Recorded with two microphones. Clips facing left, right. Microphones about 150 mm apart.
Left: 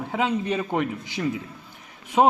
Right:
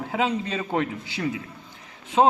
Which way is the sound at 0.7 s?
15° left (ahead or behind).